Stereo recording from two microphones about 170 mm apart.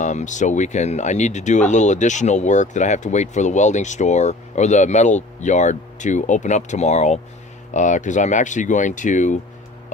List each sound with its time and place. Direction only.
0.0 s speech: 45° left (ahead or behind)